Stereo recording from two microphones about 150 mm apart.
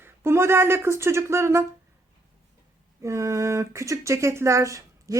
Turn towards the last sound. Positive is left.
turn(degrees=-20)  # may be behind; listen again after turning